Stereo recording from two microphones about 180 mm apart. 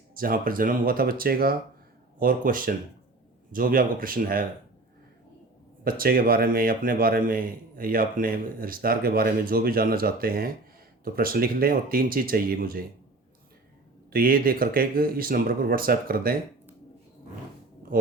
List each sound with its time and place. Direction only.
0.1 s a man's voice: 50° right (ahead or behind)
5.8 s a man's voice: 55° right (ahead or behind)
14.1 s speech: 55° right (ahead or behind)